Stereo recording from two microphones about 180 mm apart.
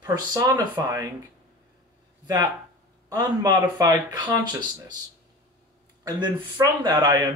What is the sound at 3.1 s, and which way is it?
Speech, 20° right (ahead or behind).